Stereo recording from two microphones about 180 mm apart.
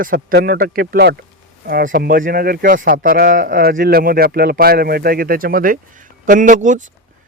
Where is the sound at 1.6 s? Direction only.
50° right (ahead or behind).